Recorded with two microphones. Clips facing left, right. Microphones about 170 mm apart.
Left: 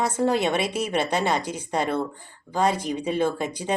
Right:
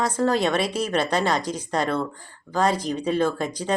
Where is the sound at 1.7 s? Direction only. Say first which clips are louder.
Even; 10° left (ahead or behind).